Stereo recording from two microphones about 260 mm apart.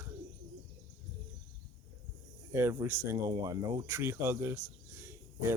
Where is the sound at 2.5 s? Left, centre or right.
Centre.